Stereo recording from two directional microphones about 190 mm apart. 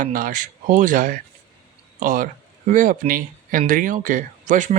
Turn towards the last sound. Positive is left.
turn(degrees=-40)  # may be behind; listen again after turning